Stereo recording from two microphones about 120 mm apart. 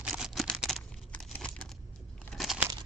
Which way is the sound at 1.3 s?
5° left (ahead or behind).